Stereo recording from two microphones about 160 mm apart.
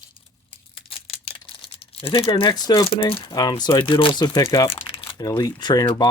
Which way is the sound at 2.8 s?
35° left (ahead or behind).